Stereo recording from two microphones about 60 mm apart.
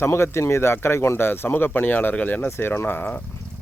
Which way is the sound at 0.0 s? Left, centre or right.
Left.